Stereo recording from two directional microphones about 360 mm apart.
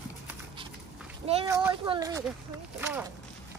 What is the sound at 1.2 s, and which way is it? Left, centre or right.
Speech, centre.